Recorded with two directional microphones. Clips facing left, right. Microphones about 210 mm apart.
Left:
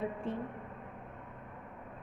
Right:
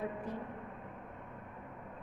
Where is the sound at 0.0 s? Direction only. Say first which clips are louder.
Left 3 dB; 25° left (ahead or behind).